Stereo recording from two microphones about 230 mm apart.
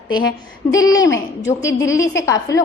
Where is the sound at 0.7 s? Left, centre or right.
Centre.